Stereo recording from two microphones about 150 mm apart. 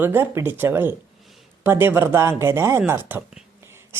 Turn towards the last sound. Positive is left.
turn(degrees=-15)  # may be behind; listen again after turning